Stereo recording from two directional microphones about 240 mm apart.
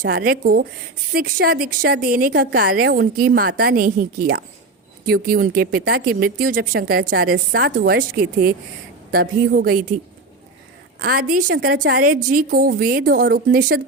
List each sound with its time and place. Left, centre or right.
0.0 s a woman's voice: right
11.0 s a woman's voice: right